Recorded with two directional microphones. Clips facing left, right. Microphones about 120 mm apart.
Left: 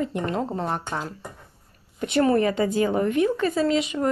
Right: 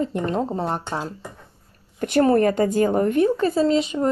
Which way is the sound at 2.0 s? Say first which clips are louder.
Right 3 dB; 40° right (ahead or behind).